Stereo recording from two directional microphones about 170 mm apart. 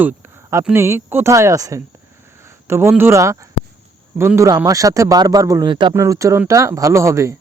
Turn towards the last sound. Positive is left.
turn(degrees=-15)  # may be behind; listen again after turning